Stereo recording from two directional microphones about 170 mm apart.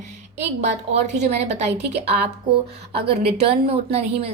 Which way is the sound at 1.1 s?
40° right (ahead or behind).